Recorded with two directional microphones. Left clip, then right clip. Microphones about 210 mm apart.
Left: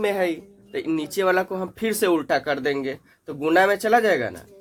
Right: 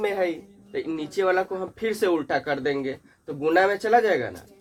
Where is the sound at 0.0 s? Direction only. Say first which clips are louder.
Left 2 dB; 50° left (ahead or behind).